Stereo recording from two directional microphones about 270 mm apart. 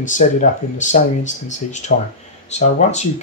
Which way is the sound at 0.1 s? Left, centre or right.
Left.